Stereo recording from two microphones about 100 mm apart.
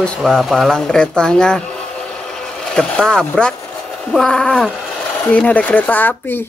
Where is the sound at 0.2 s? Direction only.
Centre (ahead or behind).